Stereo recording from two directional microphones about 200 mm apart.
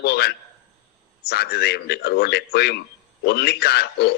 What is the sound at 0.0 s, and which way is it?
A man's voice, 55° left (ahead or behind).